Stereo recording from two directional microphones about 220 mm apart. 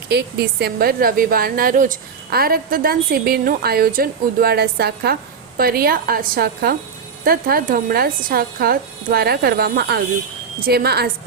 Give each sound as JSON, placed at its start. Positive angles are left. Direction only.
{"t": 0.1, "sound": "a woman's voice", "side_deg": -45}